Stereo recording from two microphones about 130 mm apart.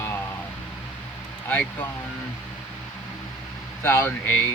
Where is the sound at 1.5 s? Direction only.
15° left (ahead or behind).